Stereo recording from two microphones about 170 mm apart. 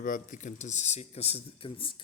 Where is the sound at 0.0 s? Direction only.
50° left (ahead or behind).